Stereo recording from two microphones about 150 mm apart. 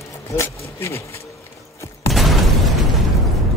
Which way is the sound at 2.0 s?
Centre (ahead or behind).